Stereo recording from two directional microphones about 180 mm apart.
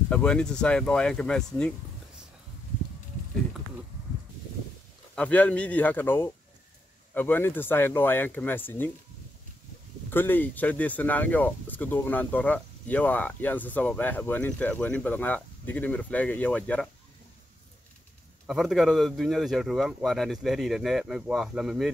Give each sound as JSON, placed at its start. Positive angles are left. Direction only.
{"t": 0.1, "sound": "speech", "side_deg": 5}
{"t": 5.1, "sound": "speech", "side_deg": 5}
{"t": 10.0, "sound": "speech", "side_deg": 10}
{"t": 18.5, "sound": "speech", "side_deg": 0}